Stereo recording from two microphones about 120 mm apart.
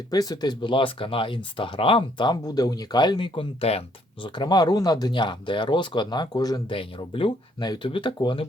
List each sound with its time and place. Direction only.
0.1 s speech: 30° left (ahead or behind); by 4.3 s 55° left (ahead or behind)
4.4 s speech: 35° left (ahead or behind)
6.7 s speech: 45° left (ahead or behind)